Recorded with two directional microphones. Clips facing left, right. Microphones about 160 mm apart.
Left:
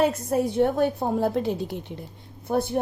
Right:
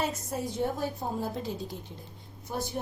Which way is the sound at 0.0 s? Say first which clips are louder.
Left 10 dB; 60° left (ahead or behind).